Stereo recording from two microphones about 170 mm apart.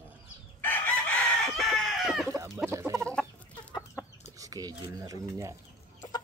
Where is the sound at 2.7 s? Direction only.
15° right (ahead or behind).